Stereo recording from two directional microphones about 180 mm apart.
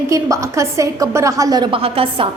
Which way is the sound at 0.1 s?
15° right (ahead or behind).